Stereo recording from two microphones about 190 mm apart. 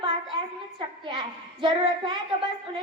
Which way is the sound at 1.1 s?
25° right (ahead or behind).